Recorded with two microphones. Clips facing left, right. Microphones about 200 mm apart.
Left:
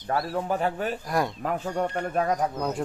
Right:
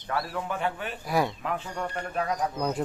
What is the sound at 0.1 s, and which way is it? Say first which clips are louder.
Speech: left 4 dB; 30° left (ahead or behind).